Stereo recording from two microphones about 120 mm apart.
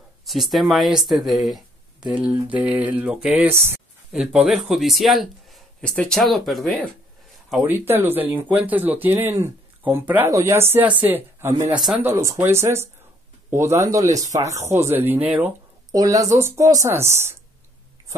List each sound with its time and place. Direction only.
0.2 s speech: centre (ahead or behind); by 3.8 s 20° right (ahead or behind)
4.1 s speech: 5° right (ahead or behind)
7.6 s speech: 20° right (ahead or behind)
11.7 s speech: centre (ahead or behind)
12.0 s speech: 20° right (ahead or behind)
15.9 s speech: 30° right (ahead or behind)